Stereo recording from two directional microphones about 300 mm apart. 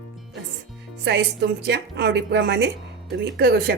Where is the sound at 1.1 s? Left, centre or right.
Right.